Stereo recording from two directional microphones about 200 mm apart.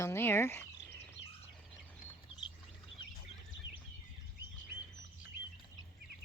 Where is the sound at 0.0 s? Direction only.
10° left (ahead or behind).